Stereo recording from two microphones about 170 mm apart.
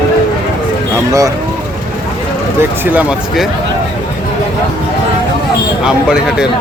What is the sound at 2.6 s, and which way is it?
Speech, 10° right (ahead or behind).